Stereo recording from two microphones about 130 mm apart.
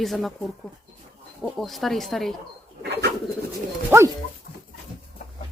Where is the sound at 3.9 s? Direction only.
15° right (ahead or behind).